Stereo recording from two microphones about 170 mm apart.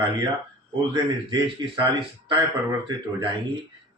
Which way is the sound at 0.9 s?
25° right (ahead or behind).